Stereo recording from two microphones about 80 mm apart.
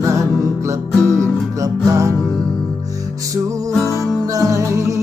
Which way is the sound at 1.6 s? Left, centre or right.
Right.